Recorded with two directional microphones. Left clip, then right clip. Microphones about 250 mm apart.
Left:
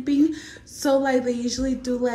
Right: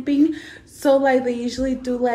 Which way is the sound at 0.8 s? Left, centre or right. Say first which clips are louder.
Right 4 dB; centre.